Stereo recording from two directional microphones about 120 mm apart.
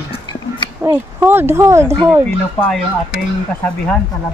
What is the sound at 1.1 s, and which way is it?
Speech, 20° right (ahead or behind).